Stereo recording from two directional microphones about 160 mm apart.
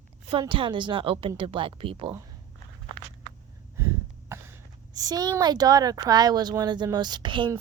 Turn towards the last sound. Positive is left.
turn(degrees=-30)  # may be behind; listen again after turning